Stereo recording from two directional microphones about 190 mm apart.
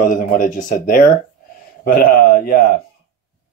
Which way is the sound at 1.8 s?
55° left (ahead or behind).